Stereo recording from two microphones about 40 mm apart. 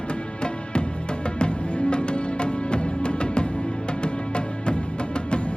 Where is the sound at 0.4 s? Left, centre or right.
Left.